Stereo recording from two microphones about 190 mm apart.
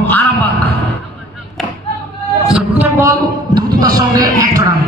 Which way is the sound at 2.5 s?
10° right (ahead or behind).